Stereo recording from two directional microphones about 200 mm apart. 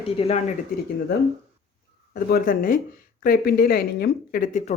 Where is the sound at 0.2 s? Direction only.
30° left (ahead or behind).